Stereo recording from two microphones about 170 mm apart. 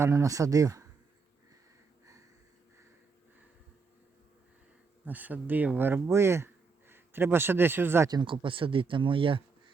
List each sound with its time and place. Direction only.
0.0 s speech: 15° right (ahead or behind)
5.0 s speech: 10° right (ahead or behind); by 9.4 s 30° right (ahead or behind)